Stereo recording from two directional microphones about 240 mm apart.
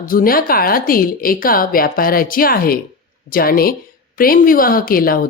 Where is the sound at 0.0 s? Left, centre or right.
Left.